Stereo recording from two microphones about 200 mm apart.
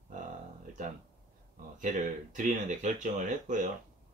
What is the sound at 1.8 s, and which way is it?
Speech, 40° right (ahead or behind).